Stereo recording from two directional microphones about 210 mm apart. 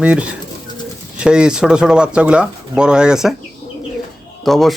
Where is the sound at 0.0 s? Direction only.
5° right (ahead or behind).